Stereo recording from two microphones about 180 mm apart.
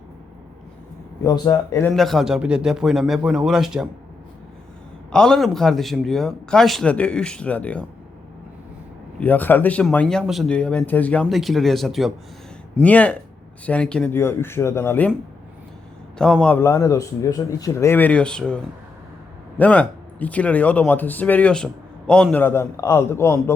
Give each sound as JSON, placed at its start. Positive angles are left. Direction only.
{"t": 1.2, "sound": "speech", "side_deg": 15}
{"t": 1.9, "sound": "speech", "side_deg": 0}
{"t": 5.1, "sound": "speech", "side_deg": 5}
{"t": 9.2, "sound": "speech", "side_deg": 10}
{"t": 16.1, "sound": "speech", "side_deg": 5}